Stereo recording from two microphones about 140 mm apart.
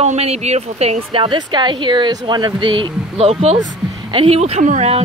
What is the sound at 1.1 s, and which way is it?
Speech, 35° right (ahead or behind).